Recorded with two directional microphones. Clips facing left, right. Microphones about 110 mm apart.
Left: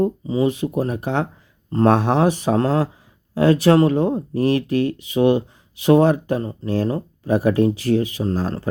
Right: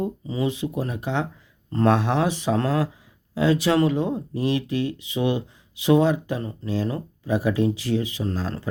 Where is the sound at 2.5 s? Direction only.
35° left (ahead or behind).